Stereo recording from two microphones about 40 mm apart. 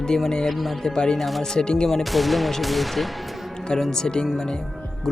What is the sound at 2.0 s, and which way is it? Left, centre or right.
Speech, centre.